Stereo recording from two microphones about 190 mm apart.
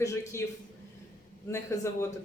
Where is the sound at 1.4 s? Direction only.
15° left (ahead or behind).